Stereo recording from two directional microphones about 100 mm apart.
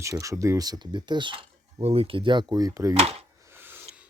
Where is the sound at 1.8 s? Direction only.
70° right (ahead or behind); by 2.9 s 35° right (ahead or behind).